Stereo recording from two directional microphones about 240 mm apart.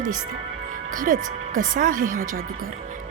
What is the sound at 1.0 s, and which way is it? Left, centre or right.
Speech, right.